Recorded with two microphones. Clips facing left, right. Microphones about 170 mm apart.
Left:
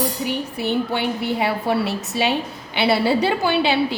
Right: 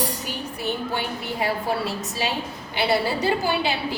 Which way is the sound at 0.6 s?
65° left (ahead or behind).